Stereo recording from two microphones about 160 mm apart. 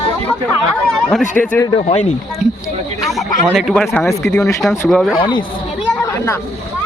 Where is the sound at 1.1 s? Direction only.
5° left (ahead or behind).